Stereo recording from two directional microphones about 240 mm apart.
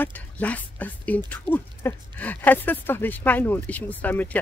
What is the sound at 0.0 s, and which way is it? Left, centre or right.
Speech, centre.